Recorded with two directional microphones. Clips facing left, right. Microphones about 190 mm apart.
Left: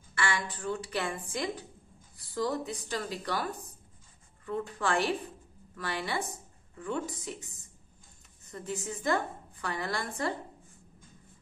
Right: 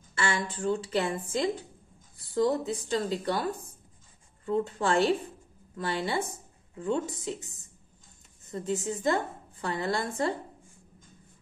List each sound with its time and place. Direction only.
0.1 s a woman's voice: 25° right (ahead or behind)